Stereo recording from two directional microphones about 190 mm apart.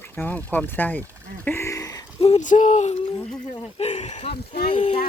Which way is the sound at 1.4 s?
15° left (ahead or behind).